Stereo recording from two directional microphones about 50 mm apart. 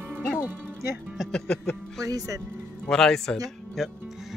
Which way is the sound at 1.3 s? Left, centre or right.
Centre.